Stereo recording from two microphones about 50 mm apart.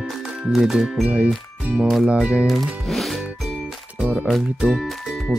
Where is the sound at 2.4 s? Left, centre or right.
Centre.